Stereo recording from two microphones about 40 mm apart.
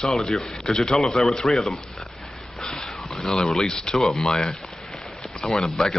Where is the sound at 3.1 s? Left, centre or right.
Centre.